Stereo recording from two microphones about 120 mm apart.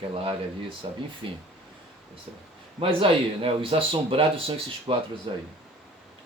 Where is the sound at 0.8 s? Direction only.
40° right (ahead or behind).